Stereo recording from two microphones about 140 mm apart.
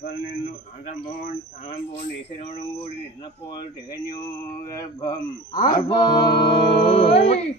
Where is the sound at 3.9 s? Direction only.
25° left (ahead or behind).